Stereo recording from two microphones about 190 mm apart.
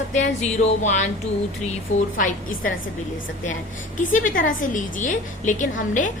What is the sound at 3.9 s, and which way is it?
A woman's voice, 45° left (ahead or behind).